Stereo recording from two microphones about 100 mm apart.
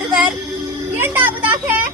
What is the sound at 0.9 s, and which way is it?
Speech, 20° right (ahead or behind).